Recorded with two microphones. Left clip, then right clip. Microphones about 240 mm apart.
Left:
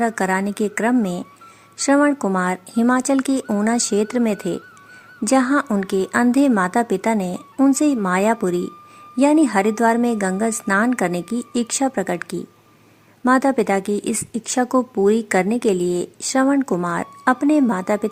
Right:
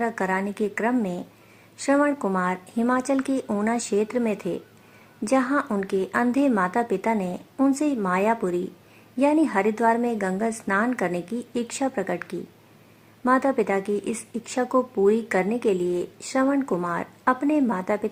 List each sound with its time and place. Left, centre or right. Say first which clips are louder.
0.0 s speech: left 5 dB; left